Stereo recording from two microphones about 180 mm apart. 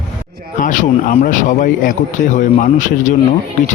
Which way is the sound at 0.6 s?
45° left (ahead or behind).